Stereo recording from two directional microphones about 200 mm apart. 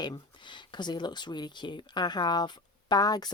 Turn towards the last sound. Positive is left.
turn(degrees=20)  # may be behind; listen again after turning